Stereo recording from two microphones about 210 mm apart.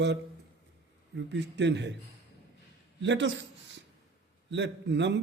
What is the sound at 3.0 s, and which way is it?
Speech, 60° right (ahead or behind).